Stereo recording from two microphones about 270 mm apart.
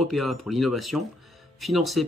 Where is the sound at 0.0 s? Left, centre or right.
Centre.